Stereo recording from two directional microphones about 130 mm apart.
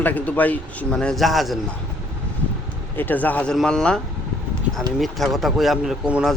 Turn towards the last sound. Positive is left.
turn(degrees=-5)  # may be behind; listen again after turning